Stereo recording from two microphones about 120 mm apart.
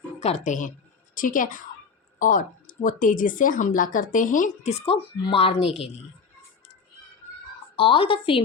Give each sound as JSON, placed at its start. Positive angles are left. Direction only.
{"t": 0.2, "sound": "a woman's voice", "side_deg": 65}
{"t": 5.3, "sound": "a woman's voice", "side_deg": 50}
{"t": 7.8, "sound": "a woman's voice", "side_deg": 50}